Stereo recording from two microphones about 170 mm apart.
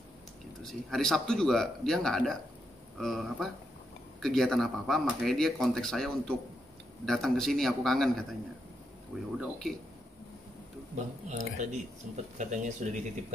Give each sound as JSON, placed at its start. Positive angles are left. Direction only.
{"t": 0.6, "sound": "speech", "side_deg": 0}
{"t": 9.4, "sound": "speech", "side_deg": 0}
{"t": 11.2, "sound": "speech", "side_deg": -45}